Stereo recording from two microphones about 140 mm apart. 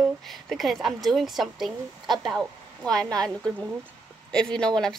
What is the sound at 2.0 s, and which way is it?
Speech, 30° right (ahead or behind).